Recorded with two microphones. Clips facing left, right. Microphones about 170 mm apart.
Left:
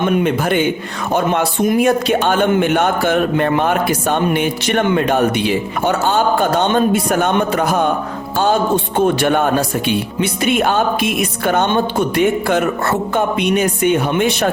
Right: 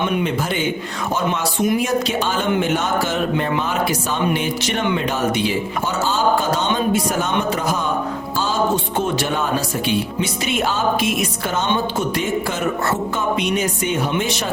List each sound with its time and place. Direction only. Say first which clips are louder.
0.0 s speech: left 5 dB; 55° left (ahead or behind)